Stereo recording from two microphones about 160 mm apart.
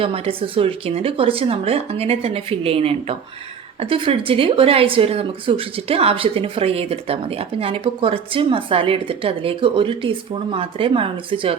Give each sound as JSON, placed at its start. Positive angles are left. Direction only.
{"t": 0.0, "sound": "speech", "side_deg": -35}